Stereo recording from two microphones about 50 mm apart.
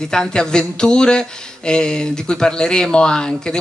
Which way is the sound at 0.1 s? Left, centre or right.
Centre.